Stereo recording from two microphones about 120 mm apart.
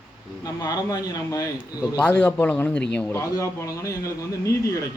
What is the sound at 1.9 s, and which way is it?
Speech, 15° left (ahead or behind).